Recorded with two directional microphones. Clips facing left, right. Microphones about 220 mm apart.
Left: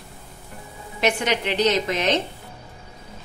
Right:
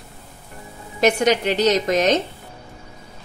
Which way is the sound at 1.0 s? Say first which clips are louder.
Right 5 dB; 40° right (ahead or behind).